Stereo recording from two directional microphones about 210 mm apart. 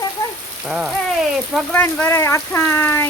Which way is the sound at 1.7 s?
10° left (ahead or behind).